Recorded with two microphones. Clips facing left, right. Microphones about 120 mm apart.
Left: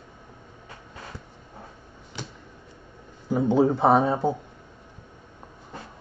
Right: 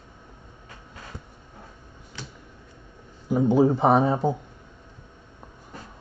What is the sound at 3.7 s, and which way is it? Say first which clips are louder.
Speech: even; 15° right (ahead or behind).